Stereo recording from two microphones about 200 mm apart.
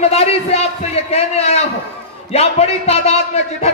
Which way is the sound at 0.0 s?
30° left (ahead or behind).